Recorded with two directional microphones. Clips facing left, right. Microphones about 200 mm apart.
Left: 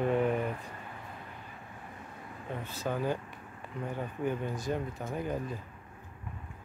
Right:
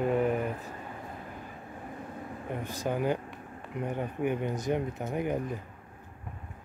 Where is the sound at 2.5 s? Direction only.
15° right (ahead or behind).